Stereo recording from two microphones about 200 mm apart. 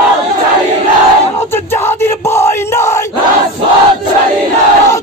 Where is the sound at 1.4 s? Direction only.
10° left (ahead or behind).